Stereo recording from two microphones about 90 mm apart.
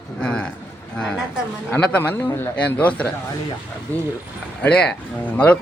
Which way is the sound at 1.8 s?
15° left (ahead or behind).